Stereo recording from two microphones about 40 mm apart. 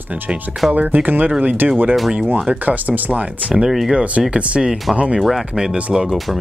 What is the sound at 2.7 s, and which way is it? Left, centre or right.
Speech, right.